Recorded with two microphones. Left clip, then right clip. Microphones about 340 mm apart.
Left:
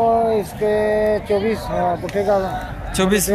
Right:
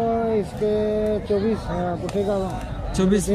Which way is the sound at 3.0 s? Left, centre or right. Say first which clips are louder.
Left 4 dB; centre.